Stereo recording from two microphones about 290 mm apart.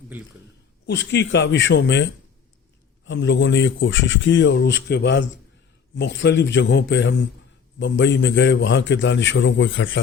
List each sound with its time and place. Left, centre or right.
0.9 s a man's voice: left
3.1 s a man's voice: left